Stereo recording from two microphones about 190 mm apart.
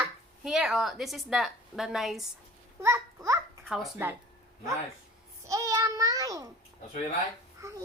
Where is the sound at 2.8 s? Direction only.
15° right (ahead or behind).